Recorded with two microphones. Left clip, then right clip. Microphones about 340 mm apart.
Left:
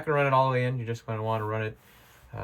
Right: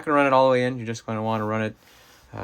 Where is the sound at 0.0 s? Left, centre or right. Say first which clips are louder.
Right 5 dB; centre.